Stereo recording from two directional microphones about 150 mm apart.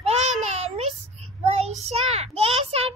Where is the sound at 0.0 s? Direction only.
45° right (ahead or behind).